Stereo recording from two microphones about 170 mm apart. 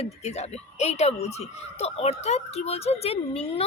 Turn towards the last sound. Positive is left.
turn(degrees=35)  # may be behind; listen again after turning